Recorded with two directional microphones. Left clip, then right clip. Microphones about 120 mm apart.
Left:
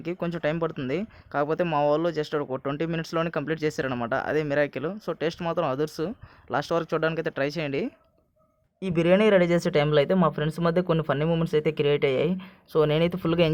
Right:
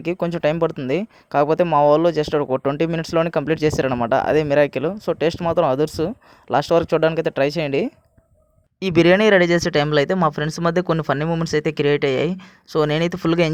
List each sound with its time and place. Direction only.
0.0 s speech: 55° right (ahead or behind)
3.8 s speech: 40° right (ahead or behind)
9.0 s speech: 85° right
11.3 s speech: 65° right (ahead or behind)